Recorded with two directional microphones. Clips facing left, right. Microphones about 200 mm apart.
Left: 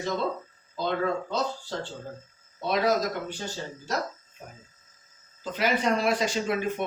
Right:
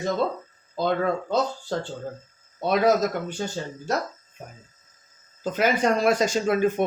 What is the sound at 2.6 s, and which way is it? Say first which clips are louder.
Speech: right 5 dB; 50° right (ahead or behind).